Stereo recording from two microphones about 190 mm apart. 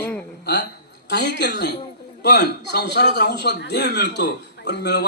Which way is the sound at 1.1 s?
65° left (ahead or behind).